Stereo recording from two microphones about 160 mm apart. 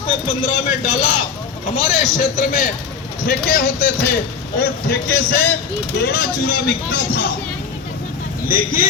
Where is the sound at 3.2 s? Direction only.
65° left (ahead or behind).